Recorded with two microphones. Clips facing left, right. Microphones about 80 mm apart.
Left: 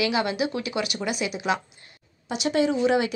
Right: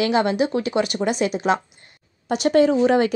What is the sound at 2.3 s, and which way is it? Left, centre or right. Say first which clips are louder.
Speech: right 7 dB; right.